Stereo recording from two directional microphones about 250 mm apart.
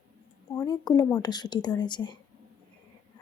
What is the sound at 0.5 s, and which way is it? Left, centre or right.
A woman's voice, centre.